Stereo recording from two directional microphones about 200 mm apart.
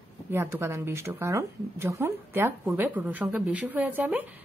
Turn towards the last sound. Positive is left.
turn(degrees=-10)  # may be behind; listen again after turning